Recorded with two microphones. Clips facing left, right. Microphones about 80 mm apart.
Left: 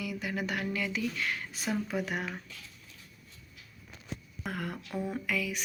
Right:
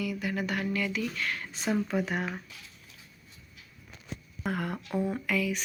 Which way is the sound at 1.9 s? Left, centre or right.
Centre.